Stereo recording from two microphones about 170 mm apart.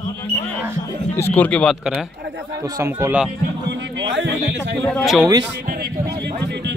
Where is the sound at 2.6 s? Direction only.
15° right (ahead or behind).